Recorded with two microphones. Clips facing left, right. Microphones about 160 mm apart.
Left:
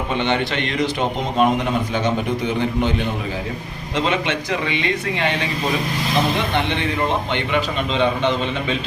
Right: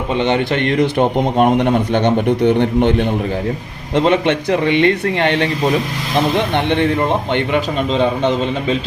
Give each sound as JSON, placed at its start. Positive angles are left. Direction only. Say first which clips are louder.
{"t": 0.2, "sound": "a man's voice", "louder": "right 6 dB", "side_deg": -45}
{"t": 3.9, "sound": "a man's voice", "louder": "right 7 dB", "side_deg": -55}
{"t": 7.9, "sound": "a man's voice", "louder": "right 3 dB", "side_deg": -45}